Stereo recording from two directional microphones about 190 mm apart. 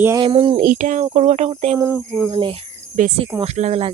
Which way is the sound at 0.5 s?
45° right (ahead or behind).